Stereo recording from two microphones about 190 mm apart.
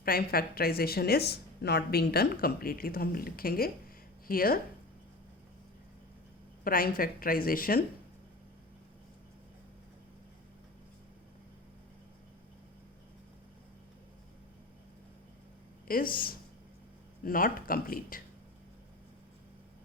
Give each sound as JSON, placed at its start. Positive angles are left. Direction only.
{"t": 0.0, "sound": "speech", "side_deg": 50}
{"t": 6.7, "sound": "speech", "side_deg": 50}
{"t": 15.9, "sound": "speech", "side_deg": 50}